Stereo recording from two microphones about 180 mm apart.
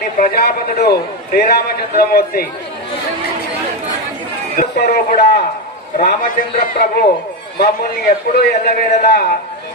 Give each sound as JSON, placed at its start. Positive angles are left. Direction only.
{"t": 0.0, "sound": "a man's voice", "side_deg": 55}
{"t": 4.6, "sound": "a man's voice", "side_deg": 55}